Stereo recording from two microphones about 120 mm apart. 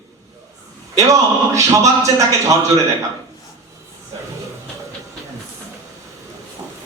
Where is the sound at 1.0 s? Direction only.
25° right (ahead or behind).